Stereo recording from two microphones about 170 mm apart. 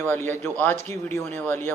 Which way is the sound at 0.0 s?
15° left (ahead or behind).